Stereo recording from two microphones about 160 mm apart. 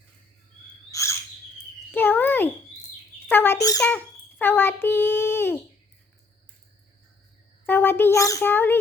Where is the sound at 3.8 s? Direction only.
10° left (ahead or behind).